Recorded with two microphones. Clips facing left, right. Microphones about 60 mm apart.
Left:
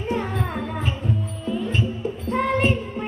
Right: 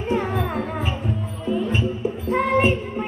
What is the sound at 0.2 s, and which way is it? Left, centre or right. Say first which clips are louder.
Music: right 3 dB; centre.